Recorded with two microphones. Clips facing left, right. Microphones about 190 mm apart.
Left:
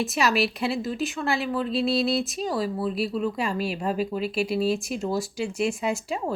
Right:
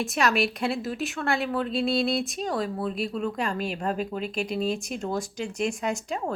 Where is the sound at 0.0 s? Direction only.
5° left (ahead or behind).